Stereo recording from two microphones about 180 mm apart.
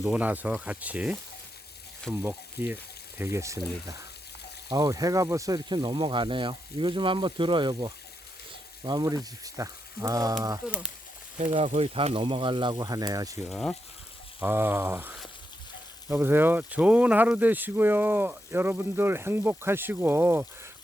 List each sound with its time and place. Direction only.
0.0 s speech: 10° right (ahead or behind)
2.2 s speech: 10° right (ahead or behind)
10.7 s speech: 5° right (ahead or behind)
11.3 s speech: 35° right (ahead or behind); by 13.4 s 20° right (ahead or behind)
13.5 s speech: centre (ahead or behind)
14.3 s speech: 10° right (ahead or behind)